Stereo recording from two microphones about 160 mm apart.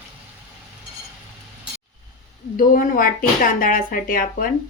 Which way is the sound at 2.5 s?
60° left (ahead or behind).